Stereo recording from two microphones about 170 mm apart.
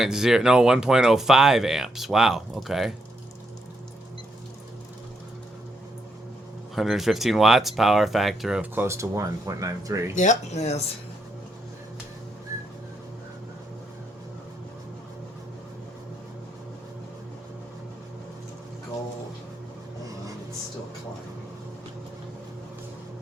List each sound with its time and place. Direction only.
0.0 s speech: 5° right (ahead or behind)
6.7 s speech: centre (ahead or behind); by 10.0 s 20° right (ahead or behind)
10.2 s speech: 45° left (ahead or behind)